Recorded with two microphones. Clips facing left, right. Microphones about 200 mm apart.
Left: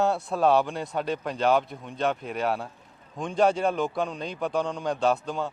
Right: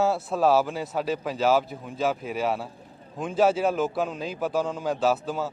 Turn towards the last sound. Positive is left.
turn(degrees=-5)  # may be behind; listen again after turning